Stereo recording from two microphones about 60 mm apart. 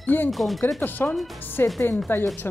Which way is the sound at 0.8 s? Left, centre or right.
Left.